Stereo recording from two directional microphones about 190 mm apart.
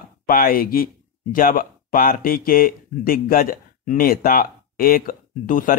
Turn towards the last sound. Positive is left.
turn(degrees=45)  # may be behind; listen again after turning